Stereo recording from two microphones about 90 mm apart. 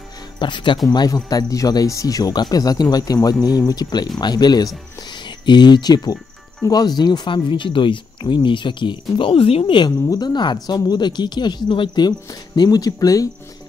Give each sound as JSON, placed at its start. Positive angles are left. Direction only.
{"t": 0.4, "sound": "speech", "side_deg": 60}
{"t": 0.8, "sound": "speech", "side_deg": 45}
{"t": 10.0, "sound": "speech", "side_deg": 50}